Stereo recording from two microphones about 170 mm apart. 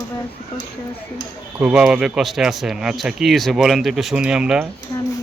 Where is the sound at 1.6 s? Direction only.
5° right (ahead or behind).